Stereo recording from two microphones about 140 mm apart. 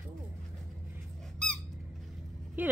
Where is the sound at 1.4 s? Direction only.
5° left (ahead or behind).